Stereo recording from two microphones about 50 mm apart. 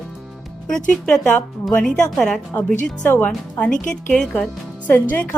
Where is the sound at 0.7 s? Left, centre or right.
Centre.